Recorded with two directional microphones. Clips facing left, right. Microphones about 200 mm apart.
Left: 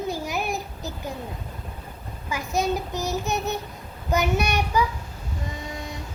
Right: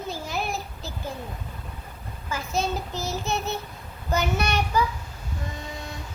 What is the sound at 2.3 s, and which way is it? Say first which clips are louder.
A child's voice: left 3 dB; 15° left (ahead or behind).